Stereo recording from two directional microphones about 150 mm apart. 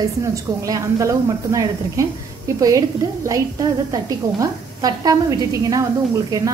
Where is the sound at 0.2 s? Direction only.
20° right (ahead or behind).